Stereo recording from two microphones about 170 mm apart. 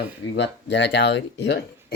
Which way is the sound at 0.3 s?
90° left.